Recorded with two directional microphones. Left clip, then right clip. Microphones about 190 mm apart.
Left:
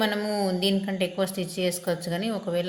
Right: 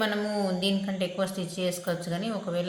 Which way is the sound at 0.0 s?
35° left (ahead or behind).